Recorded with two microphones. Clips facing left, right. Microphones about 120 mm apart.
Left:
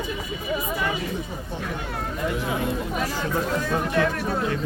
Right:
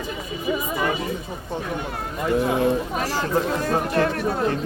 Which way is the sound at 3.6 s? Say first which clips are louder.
Right 2 dB; 45° right (ahead or behind).